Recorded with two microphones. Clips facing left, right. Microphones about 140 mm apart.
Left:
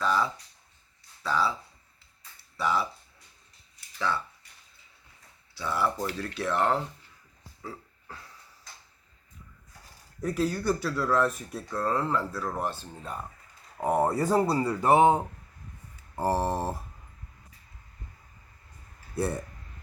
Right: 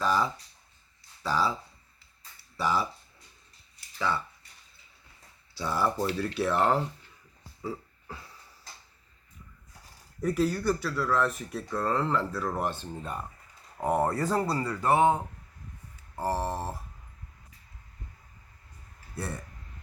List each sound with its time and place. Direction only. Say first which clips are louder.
0.0 s speech: even; 15° right (ahead or behind)
2.6 s speech: even; 15° right (ahead or behind)
3.9 s speech: even; 5° right (ahead or behind)
5.6 s speech: even; 20° right (ahead or behind)
6.1 s speech: right 2 dB; 5° right (ahead or behind)
7.6 s burping: right 5 dB; 10° right (ahead or behind)
10.2 s speech: right 1 dB; 5° right (ahead or behind); by 16.7 s 20° left (ahead or behind)